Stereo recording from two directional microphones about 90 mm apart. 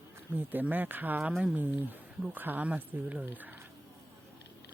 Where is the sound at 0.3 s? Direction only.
20° right (ahead or behind).